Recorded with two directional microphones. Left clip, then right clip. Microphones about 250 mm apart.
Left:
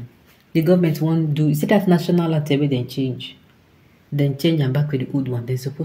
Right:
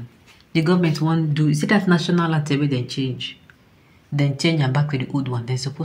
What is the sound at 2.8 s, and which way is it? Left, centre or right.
Speech, centre.